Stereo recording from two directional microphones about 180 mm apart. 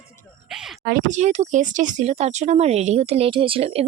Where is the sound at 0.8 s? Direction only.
50° right (ahead or behind); by 3.8 s 30° right (ahead or behind).